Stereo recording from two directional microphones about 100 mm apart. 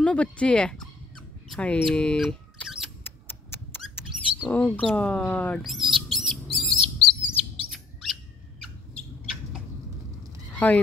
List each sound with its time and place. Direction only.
0.0 s speech: 10° left (ahead or behind)
2.2 s rodents: centre (ahead or behind)
3.0 s rodents: 20° left (ahead or behind)
4.5 s speech: 15° left (ahead or behind)
5.6 s speech: 5° right (ahead or behind)
6.0 s bird: centre (ahead or behind)
6.6 s bird: 55° right (ahead or behind)
7.2 s chirp: centre (ahead or behind)
8.9 s a sound: centre (ahead or behind)
10.5 s honk: 15° left (ahead or behind)